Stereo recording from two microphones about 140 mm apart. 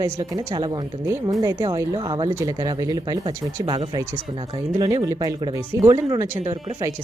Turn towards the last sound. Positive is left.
turn(degrees=-20)  # may be behind; listen again after turning